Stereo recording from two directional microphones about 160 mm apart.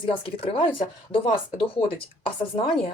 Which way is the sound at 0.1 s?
35° left (ahead or behind).